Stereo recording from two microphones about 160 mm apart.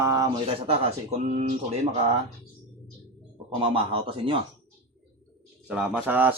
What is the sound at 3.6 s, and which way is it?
Speech, 35° right (ahead or behind).